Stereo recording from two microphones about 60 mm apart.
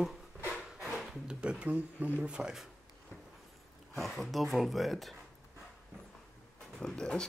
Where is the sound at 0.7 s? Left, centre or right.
Centre.